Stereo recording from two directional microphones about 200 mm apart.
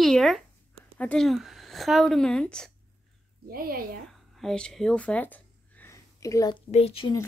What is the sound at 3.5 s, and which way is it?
Speech, 45° right (ahead or behind).